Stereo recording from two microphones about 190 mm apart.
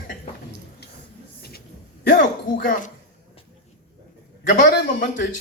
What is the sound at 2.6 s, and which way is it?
Speech, 45° left (ahead or behind).